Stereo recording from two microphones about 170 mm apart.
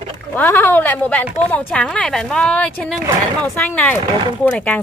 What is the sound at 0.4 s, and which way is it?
Speech, 10° left (ahead or behind).